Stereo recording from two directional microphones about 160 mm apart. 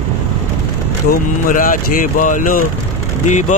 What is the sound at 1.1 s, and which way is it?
Speech, 60° left (ahead or behind).